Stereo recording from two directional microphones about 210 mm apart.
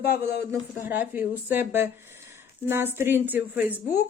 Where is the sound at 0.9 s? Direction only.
10° right (ahead or behind).